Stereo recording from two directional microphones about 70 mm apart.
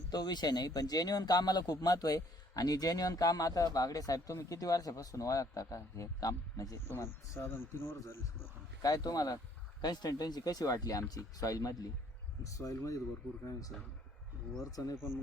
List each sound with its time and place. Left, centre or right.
0.1 s a man's voice: left
6.7 s speech: left
8.8 s a man's voice: left
9.8 s a man's voice: left